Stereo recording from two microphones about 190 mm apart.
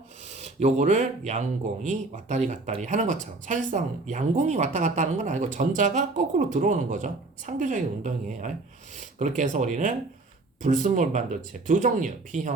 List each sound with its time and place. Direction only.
0.3 s speech: 35° right (ahead or behind)